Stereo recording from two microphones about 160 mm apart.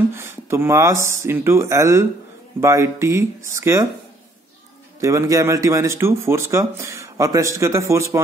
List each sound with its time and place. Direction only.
0.1 s speech: 15° right (ahead or behind)
5.0 s speech: 20° right (ahead or behind)